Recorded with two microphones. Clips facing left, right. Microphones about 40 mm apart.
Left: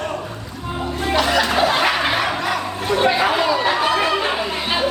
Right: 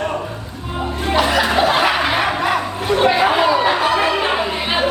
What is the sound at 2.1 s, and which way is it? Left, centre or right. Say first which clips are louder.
Chatter: right 3 dB; centre.